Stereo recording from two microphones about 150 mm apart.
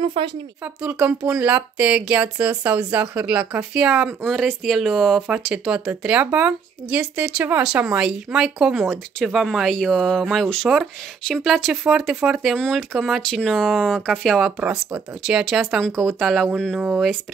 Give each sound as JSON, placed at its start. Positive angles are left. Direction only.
{"t": 0.0, "sound": "speech", "side_deg": -35}
{"t": 0.8, "sound": "speech", "side_deg": -10}
{"t": 16.8, "sound": "speech", "side_deg": -5}